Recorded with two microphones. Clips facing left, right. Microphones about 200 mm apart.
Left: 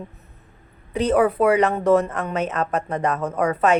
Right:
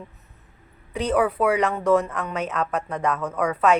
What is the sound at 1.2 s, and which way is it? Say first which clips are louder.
Speech: left 3 dB; 40° left (ahead or behind).